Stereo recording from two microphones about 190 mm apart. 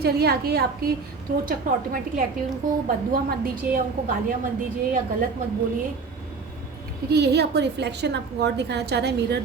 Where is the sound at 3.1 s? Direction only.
50° right (ahead or behind).